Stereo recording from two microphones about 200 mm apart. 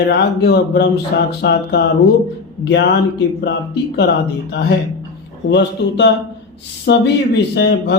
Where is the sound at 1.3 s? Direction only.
55° left (ahead or behind).